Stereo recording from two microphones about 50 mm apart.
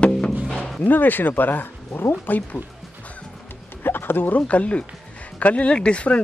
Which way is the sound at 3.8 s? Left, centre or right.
Left.